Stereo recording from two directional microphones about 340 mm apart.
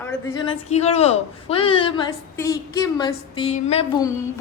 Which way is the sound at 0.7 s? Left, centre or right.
Centre.